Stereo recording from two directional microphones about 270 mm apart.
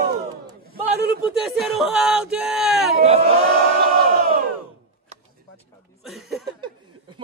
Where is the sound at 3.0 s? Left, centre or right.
Right.